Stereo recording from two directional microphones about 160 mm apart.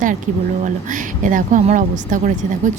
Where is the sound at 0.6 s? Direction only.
55° right (ahead or behind).